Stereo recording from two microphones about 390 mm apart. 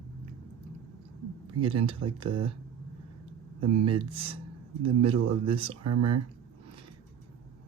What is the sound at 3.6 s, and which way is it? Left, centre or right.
Speech, right.